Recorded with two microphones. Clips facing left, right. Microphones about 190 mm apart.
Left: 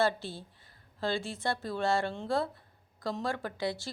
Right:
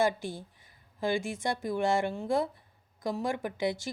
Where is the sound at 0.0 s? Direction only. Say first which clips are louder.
Right 1 dB; 15° right (ahead or behind).